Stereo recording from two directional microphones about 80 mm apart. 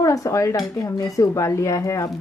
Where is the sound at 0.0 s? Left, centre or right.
Left.